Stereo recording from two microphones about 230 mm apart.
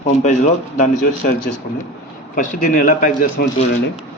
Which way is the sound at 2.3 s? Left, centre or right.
Left.